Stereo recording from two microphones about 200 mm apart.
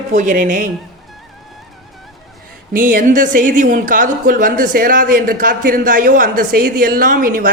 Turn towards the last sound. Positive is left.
turn(degrees=-45)  # may be behind; listen again after turning